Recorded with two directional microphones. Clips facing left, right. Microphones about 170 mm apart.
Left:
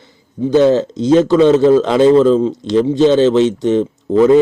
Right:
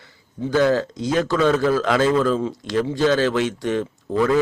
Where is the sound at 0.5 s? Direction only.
25° left (ahead or behind).